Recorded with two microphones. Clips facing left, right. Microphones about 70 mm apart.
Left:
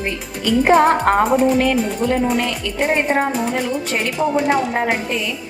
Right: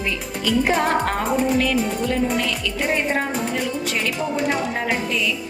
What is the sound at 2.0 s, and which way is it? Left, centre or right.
A woman's voice, left.